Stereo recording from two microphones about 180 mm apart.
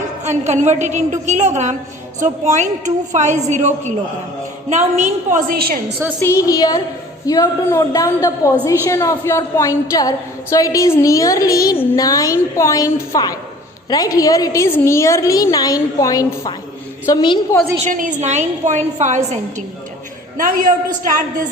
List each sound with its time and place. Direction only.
0.3 s a woman's voice: 40° right (ahead or behind); by 5.8 s 55° right (ahead or behind)
6.1 s a woman's voice: 15° left (ahead or behind)
17.8 s a woman's voice: 45° right (ahead or behind)